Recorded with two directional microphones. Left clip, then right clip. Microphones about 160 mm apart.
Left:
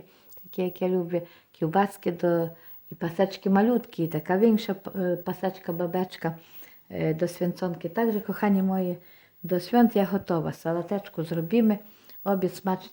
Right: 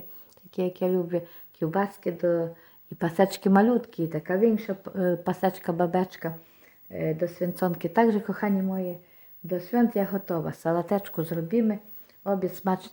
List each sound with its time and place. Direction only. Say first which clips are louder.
0.5 s speech: right 1 dB; centre (ahead or behind); by 2.5 s 20° left (ahead or behind)
3.0 s a woman's voice: right 2 dB; 15° right (ahead or behind)
3.7 s speech: even; 10° left (ahead or behind); by 4.9 s 25° left (ahead or behind)
5.2 s a woman's voice: right 4 dB; 15° right (ahead or behind)
6.9 s a woman's voice: left 1 dB; 25° left (ahead or behind)
7.5 s a woman's voice: right 5 dB; 10° right (ahead or behind)
8.3 s speech: left 2 dB; 10° left (ahead or behind)
9.5 s a woman's voice: left 3 dB; 25° left (ahead or behind)
10.5 s speech: right 3 dB; centre (ahead or behind)
11.3 s a woman's voice: left 3 dB; 20° left (ahead or behind)
12.6 s speech: right 1 dB; 5° right (ahead or behind)